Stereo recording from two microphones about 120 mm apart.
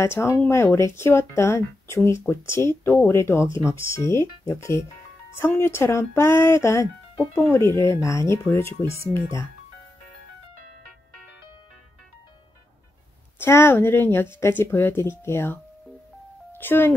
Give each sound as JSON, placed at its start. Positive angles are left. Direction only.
{"t": 0.0, "sound": "speech", "side_deg": 20}
{"t": 13.4, "sound": "speech", "side_deg": 20}